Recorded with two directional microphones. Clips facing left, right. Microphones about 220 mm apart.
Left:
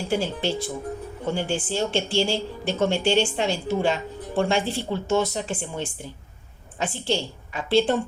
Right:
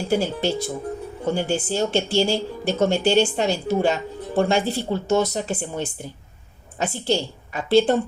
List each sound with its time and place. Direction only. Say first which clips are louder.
0.1 s a woman's voice: right 3 dB; 40° right (ahead or behind)